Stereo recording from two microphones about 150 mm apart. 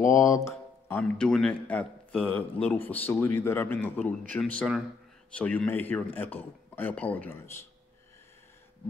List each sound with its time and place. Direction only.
0.0 s speech: 20° left (ahead or behind)